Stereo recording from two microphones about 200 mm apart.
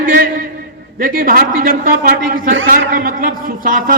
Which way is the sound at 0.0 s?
45° right (ahead or behind).